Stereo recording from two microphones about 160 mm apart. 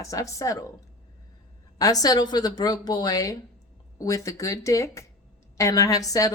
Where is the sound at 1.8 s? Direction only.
20° left (ahead or behind).